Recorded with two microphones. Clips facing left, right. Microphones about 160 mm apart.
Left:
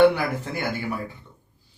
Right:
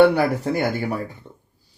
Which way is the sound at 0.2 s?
40° right (ahead or behind).